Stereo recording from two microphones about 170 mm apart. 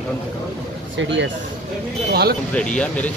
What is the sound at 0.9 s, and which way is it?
Speech, 90° right.